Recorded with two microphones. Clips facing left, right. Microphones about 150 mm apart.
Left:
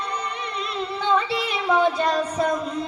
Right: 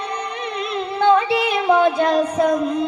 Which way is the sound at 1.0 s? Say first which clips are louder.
Right 8 dB; 55° right (ahead or behind).